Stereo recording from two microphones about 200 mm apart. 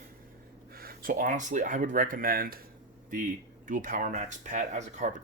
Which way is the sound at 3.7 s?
40° right (ahead or behind).